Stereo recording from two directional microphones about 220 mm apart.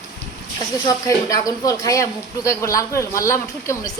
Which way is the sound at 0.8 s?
15° left (ahead or behind).